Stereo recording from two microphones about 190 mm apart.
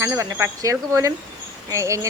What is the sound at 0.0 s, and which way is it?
Speech, 15° right (ahead or behind).